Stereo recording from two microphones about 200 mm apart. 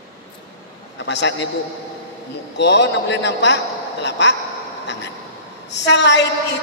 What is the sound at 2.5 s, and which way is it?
A man's voice, 60° left (ahead or behind).